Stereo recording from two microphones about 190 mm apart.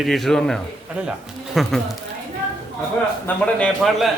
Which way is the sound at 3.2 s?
5° left (ahead or behind).